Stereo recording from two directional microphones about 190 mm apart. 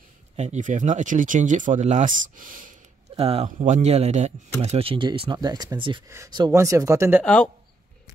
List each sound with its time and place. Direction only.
0.4 s speech: 40° right (ahead or behind)
3.2 s speech: 30° right (ahead or behind); by 7.2 s 10° right (ahead or behind)